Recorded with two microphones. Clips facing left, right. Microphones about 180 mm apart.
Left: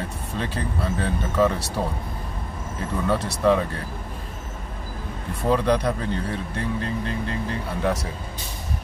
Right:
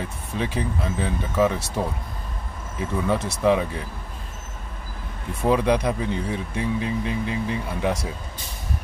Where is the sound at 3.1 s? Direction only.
15° right (ahead or behind).